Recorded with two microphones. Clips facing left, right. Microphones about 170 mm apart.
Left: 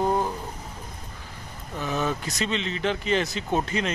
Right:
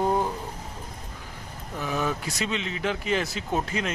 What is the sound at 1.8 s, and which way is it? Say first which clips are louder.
Speech: left 1 dB; 10° right (ahead or behind).